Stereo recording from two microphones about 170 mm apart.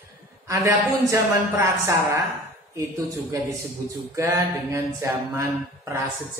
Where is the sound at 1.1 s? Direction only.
15° right (ahead or behind).